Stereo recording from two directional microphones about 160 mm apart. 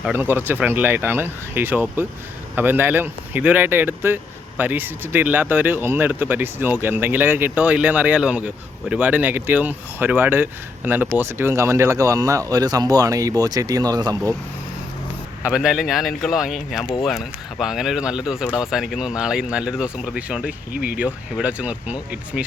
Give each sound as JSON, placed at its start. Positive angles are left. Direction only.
{"t": 0.0, "sound": "speech", "side_deg": -10}
{"t": 15.4, "sound": "speech", "side_deg": -5}